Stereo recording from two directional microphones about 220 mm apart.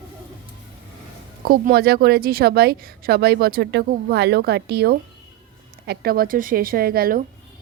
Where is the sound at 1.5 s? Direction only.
45° right (ahead or behind).